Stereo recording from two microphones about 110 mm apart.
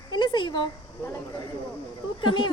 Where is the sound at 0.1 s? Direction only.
45° left (ahead or behind).